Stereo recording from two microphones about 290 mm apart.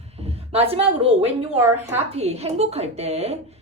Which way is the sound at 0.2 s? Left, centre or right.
Right.